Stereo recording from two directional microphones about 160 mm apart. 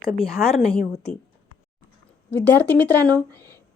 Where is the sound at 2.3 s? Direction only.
10° left (ahead or behind).